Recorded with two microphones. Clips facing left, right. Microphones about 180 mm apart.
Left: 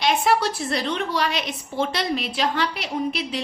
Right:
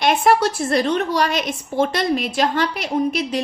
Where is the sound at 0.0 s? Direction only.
50° right (ahead or behind).